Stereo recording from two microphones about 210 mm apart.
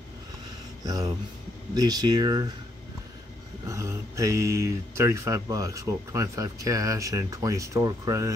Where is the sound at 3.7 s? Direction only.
15° right (ahead or behind).